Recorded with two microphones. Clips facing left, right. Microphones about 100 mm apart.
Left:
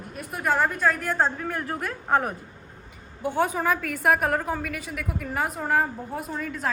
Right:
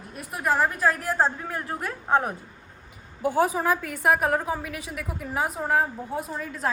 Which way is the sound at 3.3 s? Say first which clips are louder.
Right 1 dB; 5° right (ahead or behind).